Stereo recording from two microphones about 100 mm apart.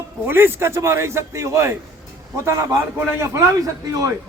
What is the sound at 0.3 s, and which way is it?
A man's voice, 20° right (ahead or behind).